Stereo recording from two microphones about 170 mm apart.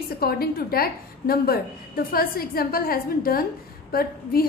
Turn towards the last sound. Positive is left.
turn(degrees=60)  # may be behind; listen again after turning